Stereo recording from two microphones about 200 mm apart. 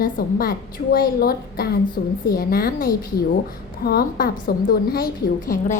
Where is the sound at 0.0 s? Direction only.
45° left (ahead or behind).